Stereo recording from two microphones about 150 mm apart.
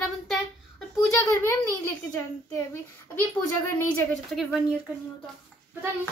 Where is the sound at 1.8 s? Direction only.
20° left (ahead or behind).